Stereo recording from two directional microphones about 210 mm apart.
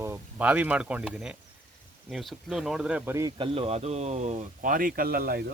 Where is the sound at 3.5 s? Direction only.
30° right (ahead or behind); by 5.5 s 45° right (ahead or behind).